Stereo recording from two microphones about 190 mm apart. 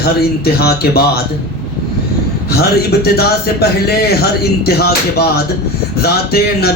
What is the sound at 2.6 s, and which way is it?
Speech, 55° left (ahead or behind).